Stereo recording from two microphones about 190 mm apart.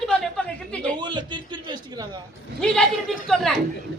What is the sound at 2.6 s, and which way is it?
Speech, 5° left (ahead or behind).